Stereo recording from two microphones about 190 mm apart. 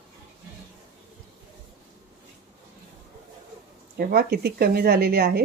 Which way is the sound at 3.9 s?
55° right (ahead or behind).